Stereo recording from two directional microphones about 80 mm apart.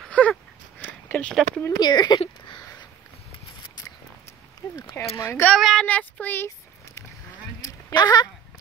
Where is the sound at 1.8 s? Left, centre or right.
Left.